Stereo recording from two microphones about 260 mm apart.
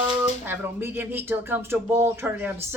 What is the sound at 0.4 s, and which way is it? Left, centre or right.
Speech, centre.